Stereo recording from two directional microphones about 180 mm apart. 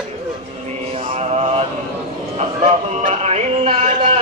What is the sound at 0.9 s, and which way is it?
Mantra, 35° right (ahead or behind).